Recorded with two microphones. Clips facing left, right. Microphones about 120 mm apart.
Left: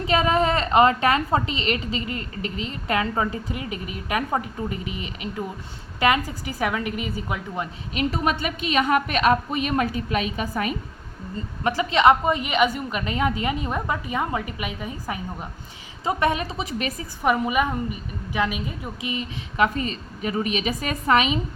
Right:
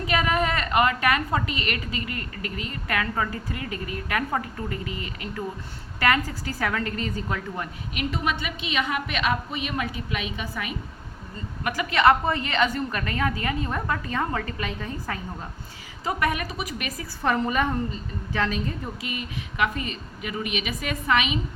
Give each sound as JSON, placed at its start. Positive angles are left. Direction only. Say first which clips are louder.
{"t": 0.0, "sound": "a woman's voice", "louder": "left 4 dB", "side_deg": 30}
{"t": 7.9, "sound": "a woman's voice", "louder": "left 4 dB", "side_deg": 40}
{"t": 11.6, "sound": "a woman's voice", "louder": "left 2 dB", "side_deg": 25}
{"t": 17.2, "sound": "a woman's voice", "louder": "left 2 dB", "side_deg": 10}
{"t": 19.1, "sound": "a woman's voice", "louder": "left 4 dB", "side_deg": 30}